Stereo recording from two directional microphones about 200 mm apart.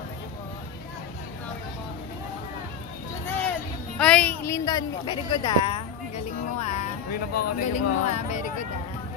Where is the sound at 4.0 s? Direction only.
5° left (ahead or behind); by 6.2 s 25° left (ahead or behind).